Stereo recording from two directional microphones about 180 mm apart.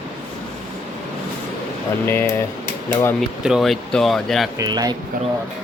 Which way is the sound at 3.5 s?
Centre (ahead or behind).